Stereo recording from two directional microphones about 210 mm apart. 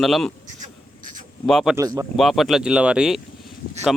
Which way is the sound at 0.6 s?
40° right (ahead or behind).